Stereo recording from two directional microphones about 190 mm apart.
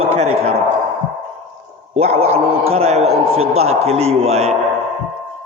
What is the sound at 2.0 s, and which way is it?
A man's voice, 35° right (ahead or behind).